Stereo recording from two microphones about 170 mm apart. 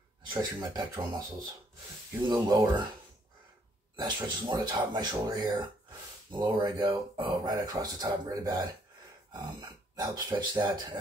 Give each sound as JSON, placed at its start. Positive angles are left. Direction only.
{"t": 0.3, "sound": "speech", "side_deg": -25}
{"t": 2.2, "sound": "speech", "side_deg": -25}
{"t": 4.0, "sound": "speech", "side_deg": -25}